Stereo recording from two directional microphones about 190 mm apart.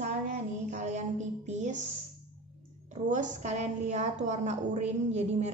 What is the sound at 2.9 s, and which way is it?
A woman's voice, 40° right (ahead or behind).